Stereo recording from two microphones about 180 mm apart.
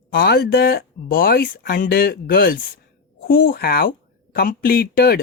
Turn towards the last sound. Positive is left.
turn(degrees=55)  # may be behind; listen again after turning